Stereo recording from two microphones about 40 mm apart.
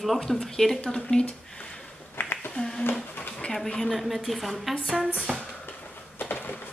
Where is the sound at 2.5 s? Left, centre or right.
Left.